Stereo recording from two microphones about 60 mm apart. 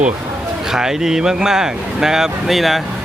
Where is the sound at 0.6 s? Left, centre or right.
Centre.